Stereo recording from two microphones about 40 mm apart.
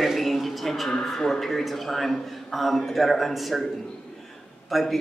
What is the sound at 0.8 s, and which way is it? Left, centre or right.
A man's voice, centre.